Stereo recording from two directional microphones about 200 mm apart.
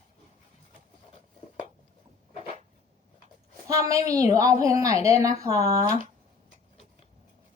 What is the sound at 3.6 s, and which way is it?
Speech, 15° right (ahead or behind).